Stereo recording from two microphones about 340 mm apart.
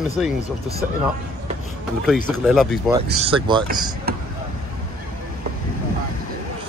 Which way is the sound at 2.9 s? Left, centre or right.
Centre.